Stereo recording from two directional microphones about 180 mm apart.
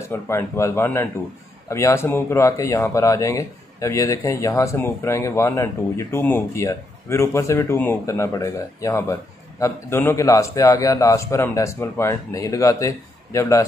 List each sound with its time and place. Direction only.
0.0 s speech: 15° left (ahead or behind)